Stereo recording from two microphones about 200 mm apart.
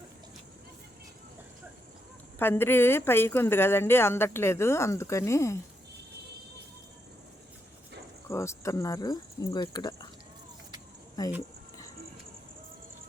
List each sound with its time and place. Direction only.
2.4 s speech: 10° left (ahead or behind)
8.3 s speech: 15° left (ahead or behind)
11.2 s speech: 15° left (ahead or behind)